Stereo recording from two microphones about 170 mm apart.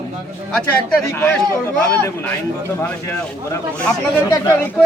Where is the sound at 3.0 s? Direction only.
15° left (ahead or behind).